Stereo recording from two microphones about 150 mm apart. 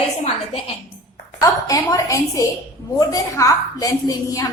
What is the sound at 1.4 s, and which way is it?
A woman's voice, 25° left (ahead or behind).